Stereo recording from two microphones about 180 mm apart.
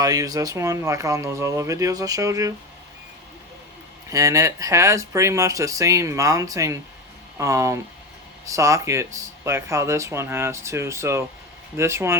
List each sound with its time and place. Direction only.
0.0 s speech: 20° right (ahead or behind)
4.1 s speech: 20° right (ahead or behind)